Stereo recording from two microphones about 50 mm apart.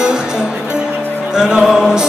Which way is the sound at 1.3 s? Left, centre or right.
Centre.